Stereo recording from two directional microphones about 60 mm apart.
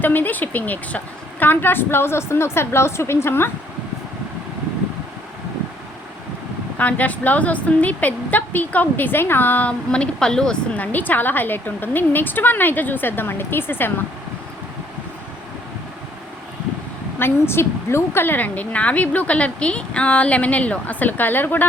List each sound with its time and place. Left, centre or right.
0.0 s speech: left
6.7 s a woman's voice: left
9.9 s speech: centre
10.8 s speech: left
17.2 s a woman's voice: left